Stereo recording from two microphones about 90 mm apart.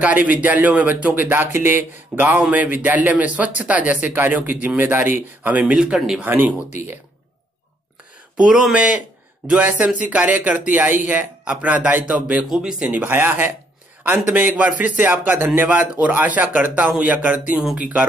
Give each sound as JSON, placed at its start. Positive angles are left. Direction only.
{"t": 0.0, "sound": "a man's voice", "side_deg": -15}
{"t": 6.2, "sound": "a man's voice", "side_deg": -20}
{"t": 8.4, "sound": "speech", "side_deg": -5}
{"t": 13.0, "sound": "a man's voice", "side_deg": -25}